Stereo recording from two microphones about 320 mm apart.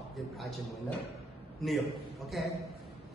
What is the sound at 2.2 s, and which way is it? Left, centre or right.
Speech, centre.